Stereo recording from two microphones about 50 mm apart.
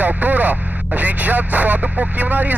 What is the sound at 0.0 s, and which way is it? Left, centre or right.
Speech, right.